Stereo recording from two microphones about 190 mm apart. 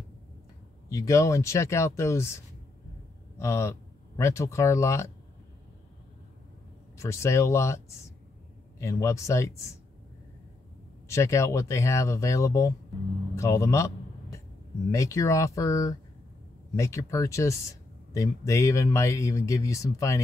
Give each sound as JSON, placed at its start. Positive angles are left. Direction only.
{"t": 0.8, "sound": "speech", "side_deg": 15}
{"t": 7.0, "sound": "speech", "side_deg": 15}
{"t": 11.1, "sound": "a man's voice", "side_deg": 15}